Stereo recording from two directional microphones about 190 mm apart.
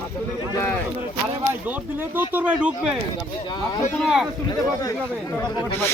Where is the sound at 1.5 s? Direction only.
10° right (ahead or behind).